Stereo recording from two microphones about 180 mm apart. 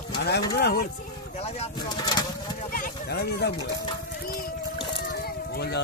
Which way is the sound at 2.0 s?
25° left (ahead or behind).